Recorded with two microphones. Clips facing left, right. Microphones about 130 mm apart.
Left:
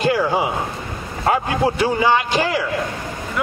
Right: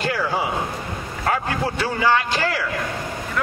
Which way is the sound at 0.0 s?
15° left (ahead or behind).